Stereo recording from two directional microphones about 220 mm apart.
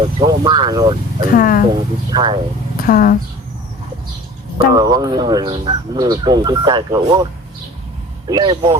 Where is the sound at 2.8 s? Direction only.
40° left (ahead or behind).